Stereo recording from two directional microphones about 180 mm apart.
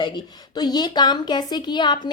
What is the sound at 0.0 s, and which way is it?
A woman's voice, 25° left (ahead or behind).